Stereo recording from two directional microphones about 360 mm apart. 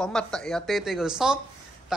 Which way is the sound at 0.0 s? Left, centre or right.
Centre.